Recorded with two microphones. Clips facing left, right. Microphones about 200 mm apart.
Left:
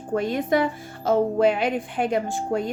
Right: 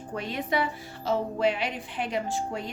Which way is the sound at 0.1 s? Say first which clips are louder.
Left 8 dB; 45° left (ahead or behind).